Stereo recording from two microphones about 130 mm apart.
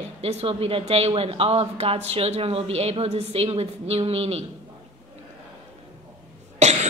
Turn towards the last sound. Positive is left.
turn(degrees=-60)  # may be behind; listen again after turning